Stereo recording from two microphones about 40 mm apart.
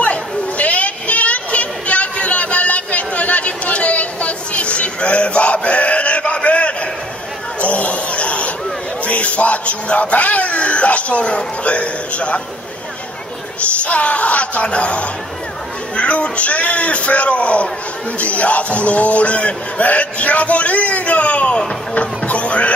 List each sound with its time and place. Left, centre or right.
0.0 s a sound: left
7.6 s chatter: left
9.0 s speech: left
13.8 s speech: left